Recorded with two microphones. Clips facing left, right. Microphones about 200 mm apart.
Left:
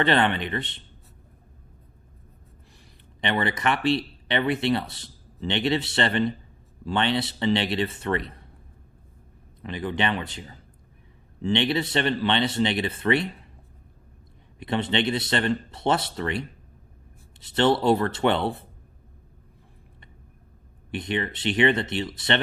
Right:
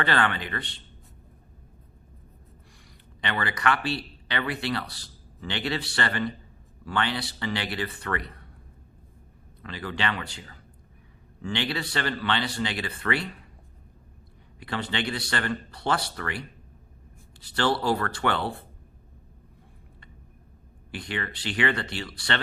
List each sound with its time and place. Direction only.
0.0 s speech: 25° left (ahead or behind)
3.2 s speech: 20° left (ahead or behind)
9.6 s speech: 20° left (ahead or behind)
14.6 s speech: 25° left (ahead or behind)
20.9 s speech: 20° left (ahead or behind)